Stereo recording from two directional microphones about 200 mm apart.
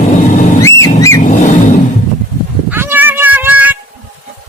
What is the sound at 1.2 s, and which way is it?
Vehicle, 40° left (ahead or behind).